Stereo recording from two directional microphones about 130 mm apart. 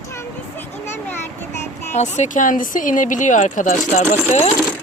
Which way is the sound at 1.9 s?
65° left (ahead or behind).